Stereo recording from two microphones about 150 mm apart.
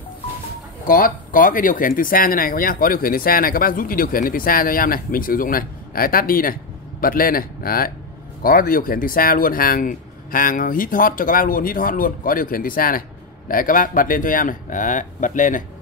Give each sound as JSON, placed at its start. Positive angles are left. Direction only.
{"t": 0.8, "sound": "speech", "side_deg": 70}